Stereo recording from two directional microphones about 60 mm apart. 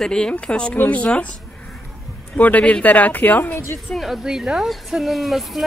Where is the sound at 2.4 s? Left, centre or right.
Left.